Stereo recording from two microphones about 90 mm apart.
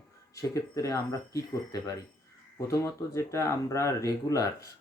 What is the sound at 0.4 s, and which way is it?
Speech, 35° left (ahead or behind).